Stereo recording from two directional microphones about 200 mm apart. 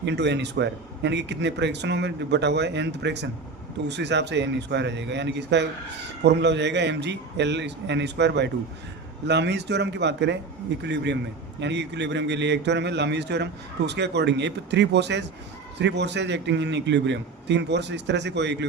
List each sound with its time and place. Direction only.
0.0 s a man's voice: 60° right (ahead or behind)